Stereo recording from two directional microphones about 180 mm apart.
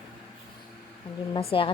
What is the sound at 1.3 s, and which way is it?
Speech, 30° left (ahead or behind).